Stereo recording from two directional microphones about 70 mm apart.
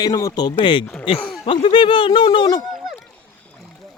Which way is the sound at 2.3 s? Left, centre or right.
Left.